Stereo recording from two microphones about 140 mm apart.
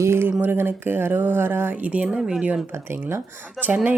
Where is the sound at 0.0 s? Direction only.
20° right (ahead or behind).